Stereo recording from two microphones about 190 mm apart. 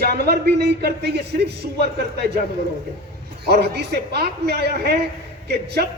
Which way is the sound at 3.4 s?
60° right (ahead or behind).